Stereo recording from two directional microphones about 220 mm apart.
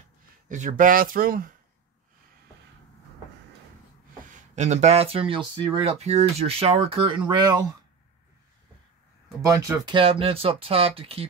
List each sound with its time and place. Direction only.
0.5 s speech: 35° right (ahead or behind)
4.4 s speech: 30° right (ahead or behind)
9.4 s speech: 15° right (ahead or behind)